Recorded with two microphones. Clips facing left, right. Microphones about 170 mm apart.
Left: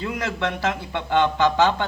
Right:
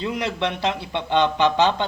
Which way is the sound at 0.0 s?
20° right (ahead or behind).